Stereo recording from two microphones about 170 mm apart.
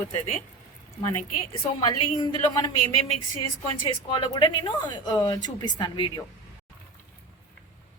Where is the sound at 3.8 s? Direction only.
30° left (ahead or behind).